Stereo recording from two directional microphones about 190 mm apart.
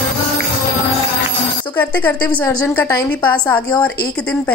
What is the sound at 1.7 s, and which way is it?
A woman's voice, 10° left (ahead or behind).